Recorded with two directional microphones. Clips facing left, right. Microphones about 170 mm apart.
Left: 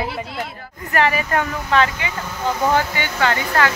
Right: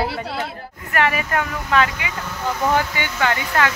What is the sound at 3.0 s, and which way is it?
Speech, 15° right (ahead or behind).